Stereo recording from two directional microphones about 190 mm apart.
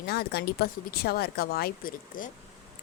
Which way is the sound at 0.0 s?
55° left (ahead or behind).